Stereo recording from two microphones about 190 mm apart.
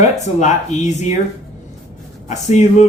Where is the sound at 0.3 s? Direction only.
40° left (ahead or behind).